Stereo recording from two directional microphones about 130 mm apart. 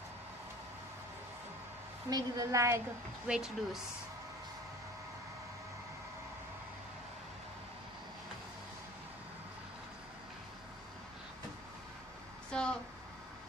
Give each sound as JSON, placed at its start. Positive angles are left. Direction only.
{"t": 2.0, "sound": "a woman's voice", "side_deg": -30}
{"t": 3.3, "sound": "speech", "side_deg": -5}
{"t": 12.4, "sound": "a sound", "side_deg": 5}